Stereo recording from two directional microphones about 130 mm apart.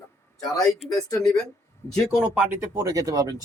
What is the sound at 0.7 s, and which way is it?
Speech, centre (ahead or behind).